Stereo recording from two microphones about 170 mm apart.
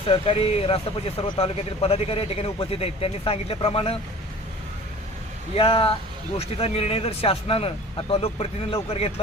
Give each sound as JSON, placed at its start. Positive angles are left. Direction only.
{"t": 0.1, "sound": "speech", "side_deg": 35}
{"t": 5.5, "sound": "speech", "side_deg": 30}